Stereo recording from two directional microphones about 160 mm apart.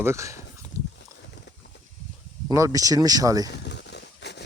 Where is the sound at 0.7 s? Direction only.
20° right (ahead or behind).